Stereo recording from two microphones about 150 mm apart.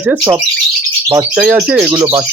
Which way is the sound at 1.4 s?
10° right (ahead or behind).